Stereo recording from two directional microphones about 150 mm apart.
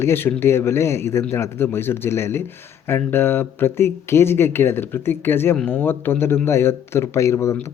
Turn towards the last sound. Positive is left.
turn(degrees=20)  # may be behind; listen again after turning